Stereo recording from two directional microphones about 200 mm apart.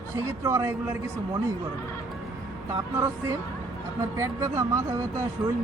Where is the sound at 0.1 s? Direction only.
15° right (ahead or behind).